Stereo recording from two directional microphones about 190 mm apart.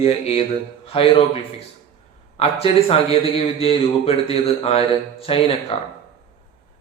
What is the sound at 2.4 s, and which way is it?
A man's voice, 30° left (ahead or behind).